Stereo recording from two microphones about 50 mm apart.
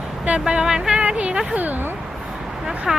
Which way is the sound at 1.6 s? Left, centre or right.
Right.